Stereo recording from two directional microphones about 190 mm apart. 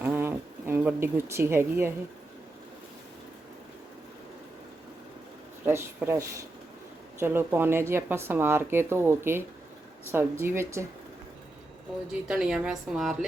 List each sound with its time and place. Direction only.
0.0 s a sound: 10° right (ahead or behind)
5.6 s speech: 15° right (ahead or behind)
12.3 s a woman's voice: 5° right (ahead or behind)